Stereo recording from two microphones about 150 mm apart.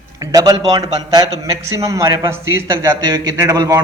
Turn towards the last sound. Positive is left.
turn(degrees=-25)  # may be behind; listen again after turning